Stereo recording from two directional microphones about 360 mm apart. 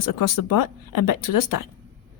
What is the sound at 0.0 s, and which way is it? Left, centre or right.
Speech, left.